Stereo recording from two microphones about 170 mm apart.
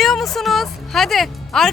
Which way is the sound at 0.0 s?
Centre (ahead or behind).